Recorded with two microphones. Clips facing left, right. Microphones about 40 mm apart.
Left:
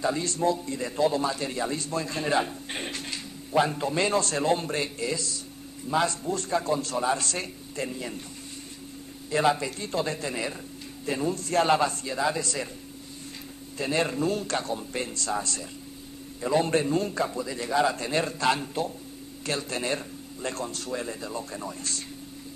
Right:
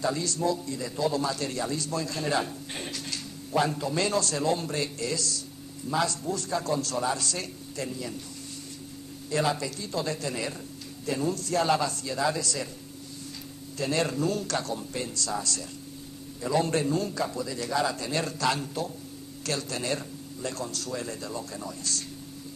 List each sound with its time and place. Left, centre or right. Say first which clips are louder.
0.2 s a man's voice: left 2 dB; left
3.5 s a man's voice: left 2 dB; left
9.3 s a man's voice: left 3 dB; left
12.1 s a man's voice: left 1 dB; left
13.7 s a man's voice: left 1 dB; left